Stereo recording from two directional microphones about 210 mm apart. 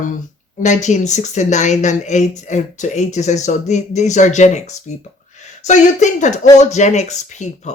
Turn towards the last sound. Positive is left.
turn(degrees=35)  # may be behind; listen again after turning